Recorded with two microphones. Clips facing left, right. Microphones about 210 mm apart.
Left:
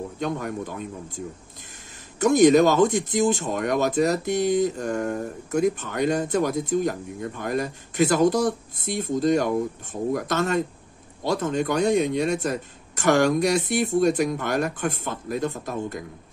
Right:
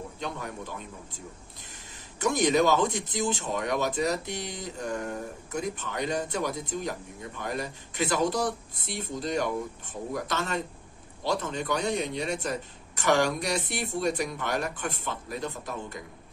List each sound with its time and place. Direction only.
0.2 s speech: 50° left (ahead or behind)
2.1 s speech: 45° left (ahead or behind)